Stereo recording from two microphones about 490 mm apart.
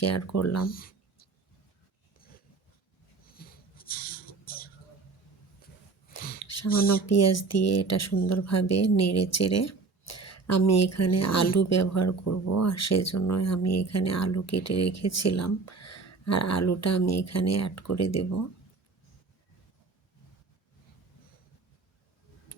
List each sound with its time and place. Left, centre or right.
0.0 s speech: left
0.7 s speech: centre
3.3 s a sound: centre
6.1 s a sound: centre
6.7 s speech: centre
7.1 s speech: left